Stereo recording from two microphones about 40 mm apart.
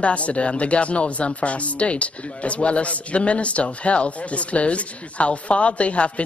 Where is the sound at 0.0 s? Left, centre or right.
Left.